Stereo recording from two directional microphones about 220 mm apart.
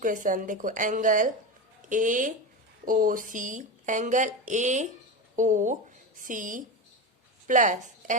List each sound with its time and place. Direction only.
0.0 s speech: 35° right (ahead or behind)